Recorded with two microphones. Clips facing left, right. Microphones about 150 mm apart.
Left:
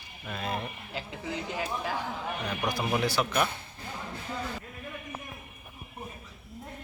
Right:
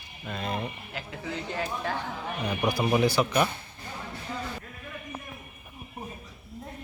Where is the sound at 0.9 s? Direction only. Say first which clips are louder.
Even; 15° left (ahead or behind).